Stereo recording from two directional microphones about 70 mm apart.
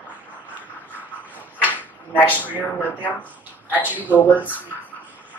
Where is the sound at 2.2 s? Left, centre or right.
Left.